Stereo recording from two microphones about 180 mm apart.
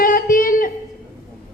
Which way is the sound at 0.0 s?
50° left (ahead or behind).